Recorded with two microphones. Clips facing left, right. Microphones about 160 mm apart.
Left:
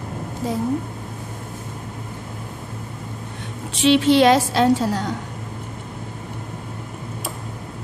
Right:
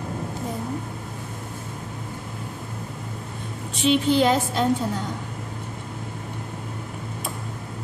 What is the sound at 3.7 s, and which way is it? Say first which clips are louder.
A woman's voice: left 5 dB; 90° left.